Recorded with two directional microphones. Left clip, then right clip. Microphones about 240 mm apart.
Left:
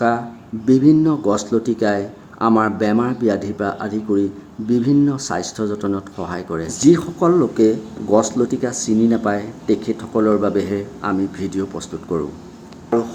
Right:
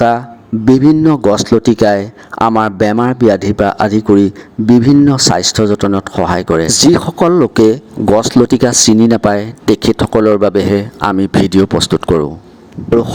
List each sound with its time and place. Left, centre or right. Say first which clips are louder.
0.6 s a man's voice: right 5 dB; right